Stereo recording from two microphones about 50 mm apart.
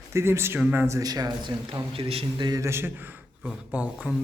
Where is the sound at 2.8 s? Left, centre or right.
Right.